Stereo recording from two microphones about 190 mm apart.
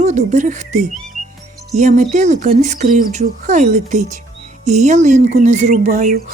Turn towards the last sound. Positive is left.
turn(degrees=-45)  # may be behind; listen again after turning